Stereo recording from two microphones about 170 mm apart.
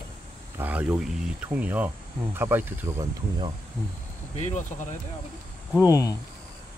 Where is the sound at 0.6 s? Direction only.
10° right (ahead or behind).